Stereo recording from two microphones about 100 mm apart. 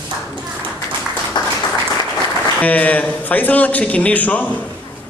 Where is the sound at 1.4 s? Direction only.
45° left (ahead or behind).